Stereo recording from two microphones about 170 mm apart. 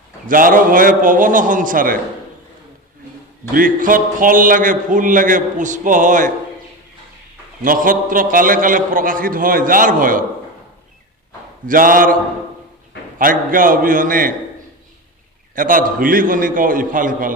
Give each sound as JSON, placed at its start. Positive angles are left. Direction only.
{"t": 0.3, "sound": "a man's voice", "side_deg": -55}
{"t": 3.5, "sound": "a man's voice", "side_deg": -55}
{"t": 7.6, "sound": "a man's voice", "side_deg": -55}
{"t": 11.6, "sound": "a man's voice", "side_deg": -55}
{"t": 13.1, "sound": "a man's voice", "side_deg": -55}
{"t": 15.5, "sound": "a man's voice", "side_deg": -55}